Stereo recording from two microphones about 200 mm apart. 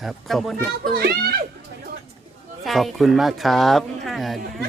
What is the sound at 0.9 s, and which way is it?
Speech, 50° right (ahead or behind).